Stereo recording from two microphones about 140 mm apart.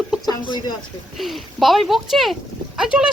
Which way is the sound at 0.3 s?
30° left (ahead or behind).